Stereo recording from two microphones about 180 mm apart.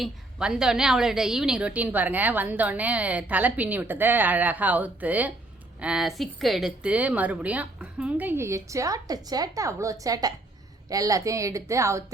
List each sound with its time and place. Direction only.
0.0 s a woman's voice: 5° right (ahead or behind)